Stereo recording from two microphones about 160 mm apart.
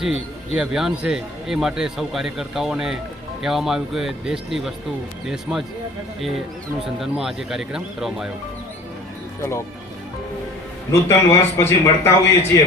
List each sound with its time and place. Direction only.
0.0 s a man's voice: 5° right (ahead or behind)
7.0 s a man's voice: centre (ahead or behind)
9.4 s a man's voice: 15° left (ahead or behind)
11.1 s a man's voice: 15° left (ahead or behind)